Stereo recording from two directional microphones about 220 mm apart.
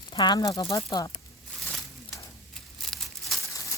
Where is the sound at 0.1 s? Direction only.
20° left (ahead or behind).